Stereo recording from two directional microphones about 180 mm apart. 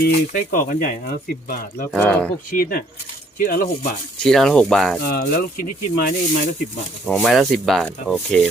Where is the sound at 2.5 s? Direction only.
50° left (ahead or behind).